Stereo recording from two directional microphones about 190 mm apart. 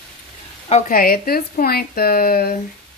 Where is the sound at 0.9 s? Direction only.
50° left (ahead or behind).